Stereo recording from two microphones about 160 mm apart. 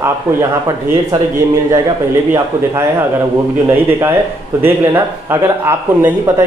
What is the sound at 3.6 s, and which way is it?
A man's voice, 15° right (ahead or behind).